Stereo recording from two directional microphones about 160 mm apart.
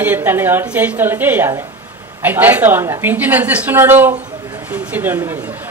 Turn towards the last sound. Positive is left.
turn(degrees=-10)  # may be behind; listen again after turning